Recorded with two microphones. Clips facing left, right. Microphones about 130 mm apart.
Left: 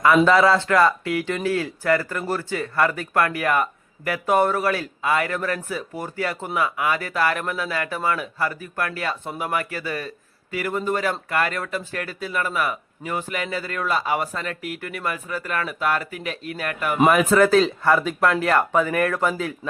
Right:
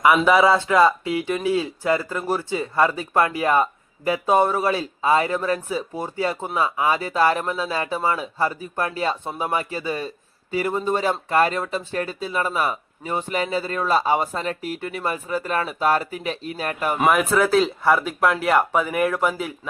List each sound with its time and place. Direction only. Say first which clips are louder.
0.3 s speech: even; 15° right (ahead or behind); by 17.0 s 30° right (ahead or behind)
17.1 s speech: left 2 dB; centre (ahead or behind)